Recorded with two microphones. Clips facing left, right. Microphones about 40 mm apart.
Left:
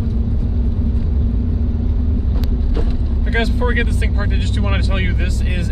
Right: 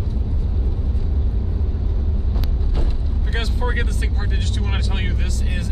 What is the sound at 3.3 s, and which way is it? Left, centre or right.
Vehicle, left.